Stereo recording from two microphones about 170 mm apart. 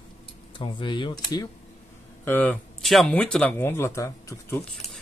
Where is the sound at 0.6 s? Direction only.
30° left (ahead or behind).